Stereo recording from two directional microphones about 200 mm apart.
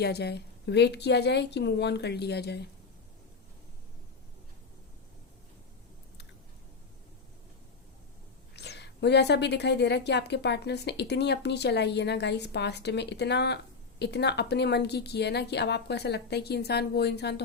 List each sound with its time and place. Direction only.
0.0 s a woman's voice: 55° left (ahead or behind)
8.5 s a woman's voice: 55° left (ahead or behind)